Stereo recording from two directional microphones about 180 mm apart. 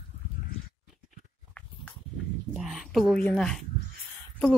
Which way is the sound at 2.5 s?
Centre (ahead or behind).